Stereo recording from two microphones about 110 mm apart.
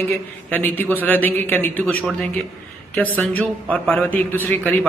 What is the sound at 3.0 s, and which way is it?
Speech, 15° left (ahead or behind).